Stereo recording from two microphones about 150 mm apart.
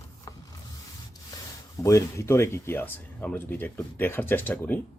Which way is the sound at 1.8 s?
20° left (ahead or behind).